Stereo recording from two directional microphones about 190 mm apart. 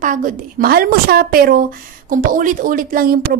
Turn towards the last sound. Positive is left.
turn(degrees=-50)  # may be behind; listen again after turning